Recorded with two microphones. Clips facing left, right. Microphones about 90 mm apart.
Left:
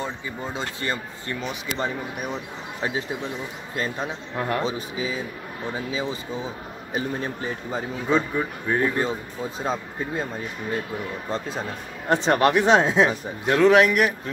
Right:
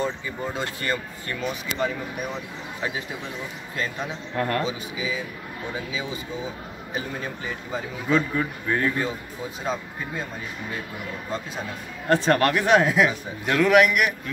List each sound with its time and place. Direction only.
0.6 s speech: 25° left (ahead or behind)
3.7 s speech: 35° left (ahead or behind)
4.4 s speech: 15° left (ahead or behind)
4.6 s speech: 40° left (ahead or behind)
7.2 s speech: 35° left (ahead or behind)
8.4 s speech: 20° left (ahead or behind)
12.1 s speech: 20° left (ahead or behind)